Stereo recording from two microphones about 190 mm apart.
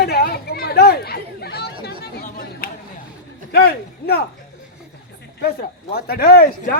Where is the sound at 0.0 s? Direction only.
55° left (ahead or behind).